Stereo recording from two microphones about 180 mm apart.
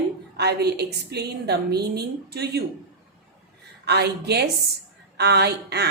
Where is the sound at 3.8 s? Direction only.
65° right (ahead or behind).